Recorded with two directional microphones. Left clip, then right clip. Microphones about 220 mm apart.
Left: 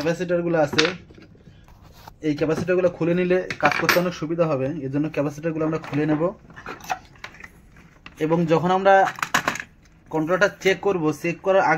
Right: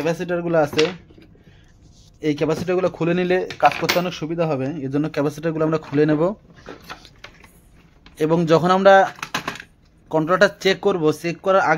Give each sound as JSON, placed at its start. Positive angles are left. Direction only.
{"t": 0.0, "sound": "speech", "side_deg": -55}
{"t": 2.1, "sound": "speech", "side_deg": -50}
{"t": 8.2, "sound": "speech", "side_deg": -50}
{"t": 10.0, "sound": "speech", "side_deg": -50}